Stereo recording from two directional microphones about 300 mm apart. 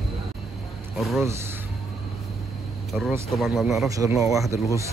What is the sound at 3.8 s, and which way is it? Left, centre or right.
Speech, centre.